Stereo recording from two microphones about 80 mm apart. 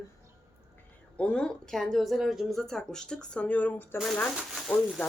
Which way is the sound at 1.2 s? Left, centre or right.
Centre.